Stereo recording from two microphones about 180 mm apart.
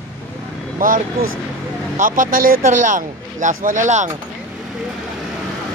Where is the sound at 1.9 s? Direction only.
50° right (ahead or behind).